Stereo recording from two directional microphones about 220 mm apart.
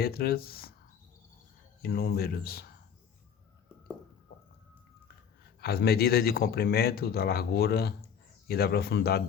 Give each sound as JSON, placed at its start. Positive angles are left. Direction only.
{"t": 0.0, "sound": "speech", "side_deg": 45}
{"t": 1.8, "sound": "speech", "side_deg": 45}
{"t": 5.5, "sound": "speech", "side_deg": 45}